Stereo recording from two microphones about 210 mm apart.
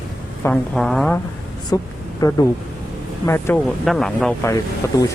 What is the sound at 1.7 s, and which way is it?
Speech, 20° left (ahead or behind).